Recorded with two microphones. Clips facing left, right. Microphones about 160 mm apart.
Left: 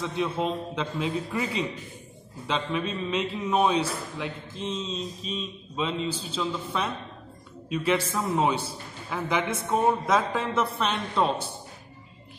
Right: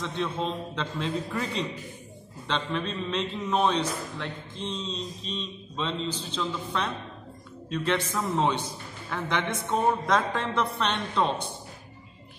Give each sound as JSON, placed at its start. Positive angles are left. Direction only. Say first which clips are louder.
{"t": 0.0, "sound": "a man's voice", "louder": "left 2 dB", "side_deg": 5}